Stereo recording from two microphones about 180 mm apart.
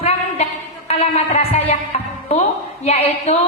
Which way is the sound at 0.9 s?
35° left (ahead or behind).